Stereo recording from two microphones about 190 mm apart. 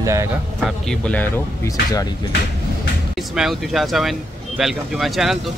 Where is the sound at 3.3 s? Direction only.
Centre (ahead or behind).